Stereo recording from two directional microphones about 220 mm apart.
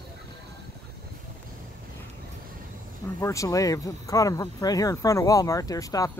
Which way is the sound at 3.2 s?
15° left (ahead or behind).